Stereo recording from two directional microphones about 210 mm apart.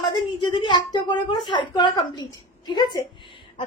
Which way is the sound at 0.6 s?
20° left (ahead or behind).